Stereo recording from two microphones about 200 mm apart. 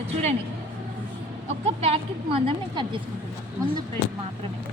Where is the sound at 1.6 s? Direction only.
30° right (ahead or behind).